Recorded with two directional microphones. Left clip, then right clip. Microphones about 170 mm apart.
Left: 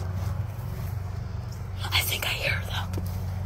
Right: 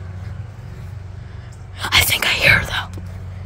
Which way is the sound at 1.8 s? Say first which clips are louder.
Right 11 dB; 50° right (ahead or behind).